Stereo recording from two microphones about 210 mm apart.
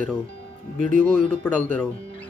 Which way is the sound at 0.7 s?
40° right (ahead or behind).